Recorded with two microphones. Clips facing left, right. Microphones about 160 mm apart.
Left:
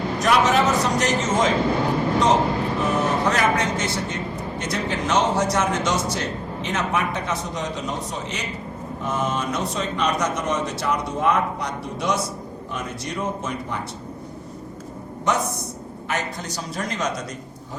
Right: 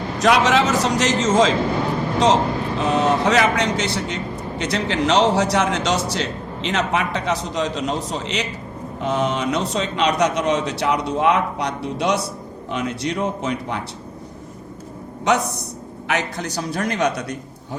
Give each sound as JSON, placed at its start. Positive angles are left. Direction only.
{"t": 0.2, "sound": "a man's voice", "side_deg": -75}
{"t": 16.0, "sound": "speech", "side_deg": -75}